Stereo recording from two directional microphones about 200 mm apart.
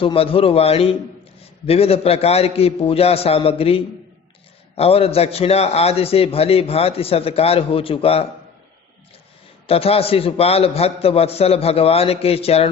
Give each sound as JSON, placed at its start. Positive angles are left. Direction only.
{"t": 0.0, "sound": "a man's voice", "side_deg": 25}
{"t": 9.6, "sound": "a man's voice", "side_deg": 30}